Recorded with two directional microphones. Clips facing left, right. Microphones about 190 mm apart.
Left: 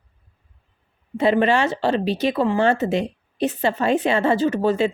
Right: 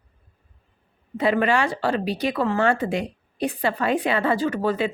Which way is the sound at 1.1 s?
25° left (ahead or behind).